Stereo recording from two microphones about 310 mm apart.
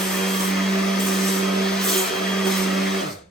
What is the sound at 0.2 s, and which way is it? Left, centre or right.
Vacuum cleaner, centre.